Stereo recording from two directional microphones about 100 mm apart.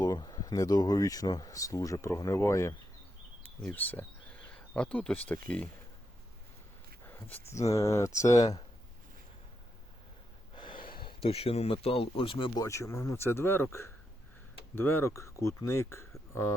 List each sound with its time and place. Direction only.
0.0 s speech: 40° left (ahead or behind)
3.7 s speech: 15° left (ahead or behind)
7.0 s a sound: 20° left (ahead or behind)
7.7 s speech: 30° left (ahead or behind)
10.5 s a sound: 55° left (ahead or behind)
11.3 s speech: 85° left; by 12.5 s 60° left (ahead or behind)
12.5 s speech: 30° left (ahead or behind)